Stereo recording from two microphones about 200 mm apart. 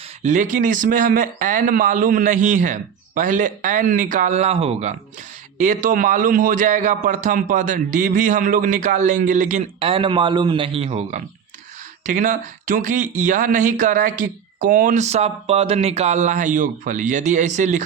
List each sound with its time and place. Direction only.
0.2 s speech: 40° right (ahead or behind)